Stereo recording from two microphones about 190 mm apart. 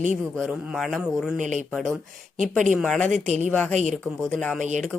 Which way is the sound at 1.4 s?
40° right (ahead or behind).